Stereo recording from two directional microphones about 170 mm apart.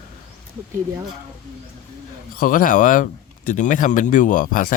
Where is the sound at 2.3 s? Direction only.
55° left (ahead or behind).